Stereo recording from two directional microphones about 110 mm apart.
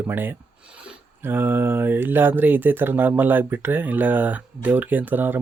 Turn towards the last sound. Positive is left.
turn(degrees=-15)  # may be behind; listen again after turning